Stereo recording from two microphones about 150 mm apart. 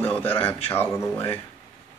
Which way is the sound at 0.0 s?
15° left (ahead or behind).